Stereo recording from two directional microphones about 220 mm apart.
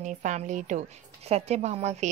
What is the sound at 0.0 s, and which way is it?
A woman's voice, 35° right (ahead or behind).